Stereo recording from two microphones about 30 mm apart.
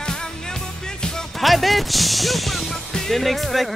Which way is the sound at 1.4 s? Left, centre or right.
Centre.